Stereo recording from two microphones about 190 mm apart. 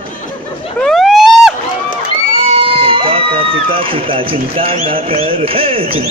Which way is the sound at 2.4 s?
30° right (ahead or behind).